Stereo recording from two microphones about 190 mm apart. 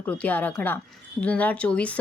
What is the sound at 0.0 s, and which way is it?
Speech, 10° left (ahead or behind).